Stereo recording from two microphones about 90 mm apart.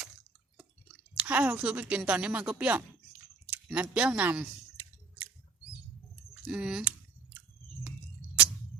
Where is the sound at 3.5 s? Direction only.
15° right (ahead or behind).